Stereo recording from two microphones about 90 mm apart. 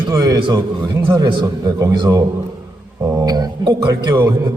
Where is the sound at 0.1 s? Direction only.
40° right (ahead or behind).